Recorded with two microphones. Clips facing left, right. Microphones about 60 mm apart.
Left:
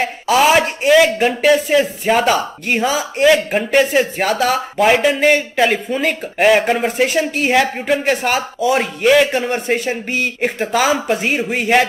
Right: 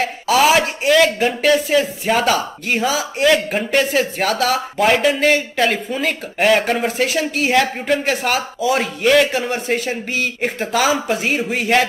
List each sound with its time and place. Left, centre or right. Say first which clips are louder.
0.0 s speech: left 1 dB; centre